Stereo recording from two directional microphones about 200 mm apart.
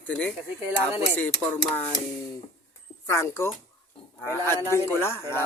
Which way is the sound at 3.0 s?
15° left (ahead or behind).